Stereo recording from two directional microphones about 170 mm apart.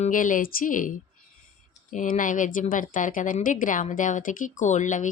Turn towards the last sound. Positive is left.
turn(degrees=45)  # may be behind; listen again after turning